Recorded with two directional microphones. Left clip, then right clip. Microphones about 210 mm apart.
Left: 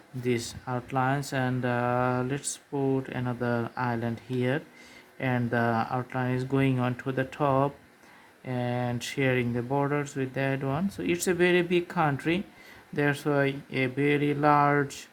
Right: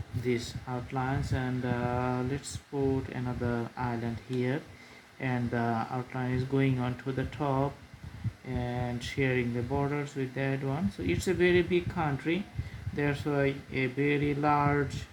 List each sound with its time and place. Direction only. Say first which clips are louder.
0.3 s speech: left 3 dB; 35° left (ahead or behind)